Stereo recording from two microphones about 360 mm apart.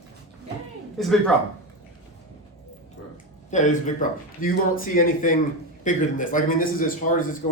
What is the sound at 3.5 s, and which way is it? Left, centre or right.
A man's voice, left.